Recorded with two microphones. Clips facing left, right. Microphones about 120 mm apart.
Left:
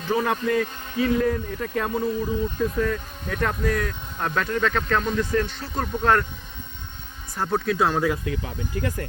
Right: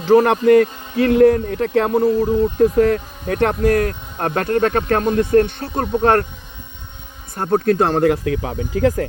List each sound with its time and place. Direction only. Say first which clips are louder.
0.0 s a man's voice: right 11 dB; 70° right (ahead or behind)
7.3 s a man's voice: right 7 dB; 55° right (ahead or behind); by 9.0 s 90° right